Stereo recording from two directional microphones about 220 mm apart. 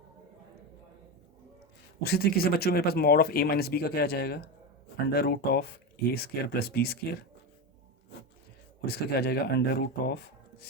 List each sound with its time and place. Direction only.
2.0 s speech: 45° left (ahead or behind)
8.9 s speech: 45° left (ahead or behind)